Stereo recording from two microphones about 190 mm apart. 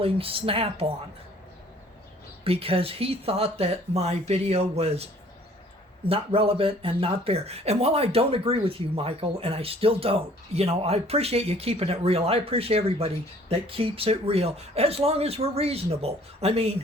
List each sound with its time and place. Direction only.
0.0 s speech: 30° right (ahead or behind)
2.4 s speech: 30° right (ahead or behind)
6.1 s speech: 30° right (ahead or behind)